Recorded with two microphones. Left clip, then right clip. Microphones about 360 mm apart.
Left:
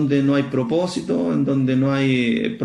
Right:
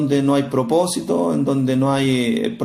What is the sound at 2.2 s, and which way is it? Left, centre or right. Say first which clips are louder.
Speech: right 1 dB; right.